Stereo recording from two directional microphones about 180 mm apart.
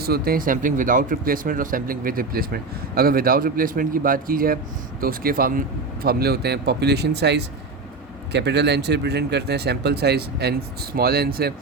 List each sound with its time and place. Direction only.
0.0 s speech: 55° right (ahead or behind)